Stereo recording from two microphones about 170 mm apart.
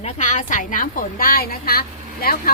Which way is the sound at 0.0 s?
45° left (ahead or behind).